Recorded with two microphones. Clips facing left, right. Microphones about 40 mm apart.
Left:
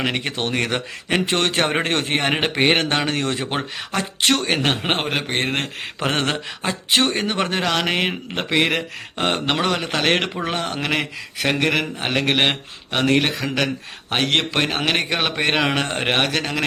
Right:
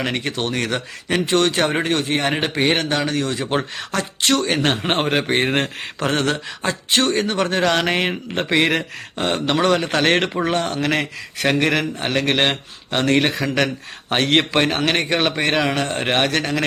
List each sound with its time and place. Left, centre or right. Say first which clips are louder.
0.0 s a man's voice: even; centre; by 2.3 s left
2.3 s a man's voice: left 1 dB; left
4.9 s a man's voice: right 3 dB; centre
6.1 s a man's voice: right 2 dB; left
7.5 s a man's voice: right 4 dB; centre
9.1 s a man's voice: right 1 dB; left
9.6 s a man's voice: right 4 dB; centre
11.8 s a man's voice: right 1 dB; centre
15.7 s a man's voice: even; left
16.0 s a man's voice: right 2 dB; centre